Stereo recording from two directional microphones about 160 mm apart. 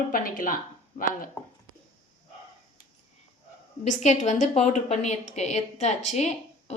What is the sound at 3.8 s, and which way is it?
A woman's voice, 50° left (ahead or behind).